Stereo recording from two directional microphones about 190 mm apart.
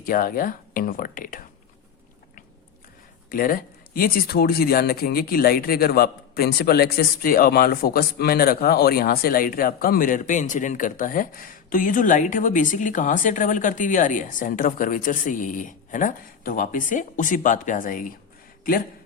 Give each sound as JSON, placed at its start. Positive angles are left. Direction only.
{"t": 0.0, "sound": "speech", "side_deg": 50}
{"t": 3.2, "sound": "speech", "side_deg": 50}